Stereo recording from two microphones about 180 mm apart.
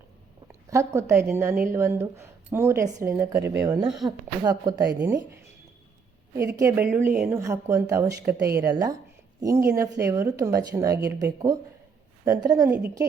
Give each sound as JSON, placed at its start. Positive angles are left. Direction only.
{"t": 0.7, "sound": "speech", "side_deg": -15}
{"t": 3.8, "sound": "speech", "side_deg": 0}
{"t": 4.4, "sound": "a woman's voice", "side_deg": -20}